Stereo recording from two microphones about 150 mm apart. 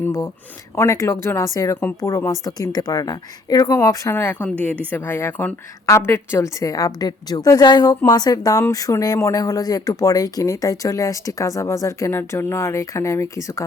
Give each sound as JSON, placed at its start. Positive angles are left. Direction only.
{"t": 0.0, "sound": "a woman's voice", "side_deg": 15}